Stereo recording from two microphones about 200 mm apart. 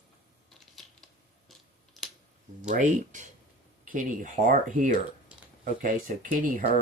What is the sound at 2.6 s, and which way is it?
Speech, 40° right (ahead or behind).